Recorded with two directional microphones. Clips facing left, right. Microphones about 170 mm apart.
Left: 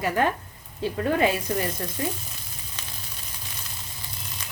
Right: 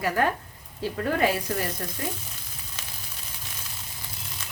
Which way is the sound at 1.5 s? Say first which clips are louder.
Left 2 dB; 20° left (ahead or behind).